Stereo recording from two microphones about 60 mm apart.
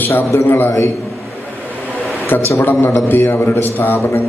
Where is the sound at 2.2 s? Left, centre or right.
Left.